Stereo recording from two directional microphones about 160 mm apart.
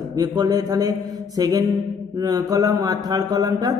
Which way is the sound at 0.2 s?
25° right (ahead or behind).